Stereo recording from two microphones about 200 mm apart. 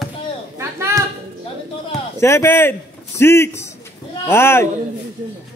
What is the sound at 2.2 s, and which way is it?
A man's voice, 15° left (ahead or behind).